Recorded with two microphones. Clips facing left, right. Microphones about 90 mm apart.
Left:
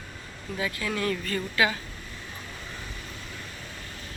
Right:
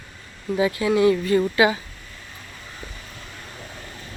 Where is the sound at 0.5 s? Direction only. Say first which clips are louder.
Right 11 dB; 25° right (ahead or behind).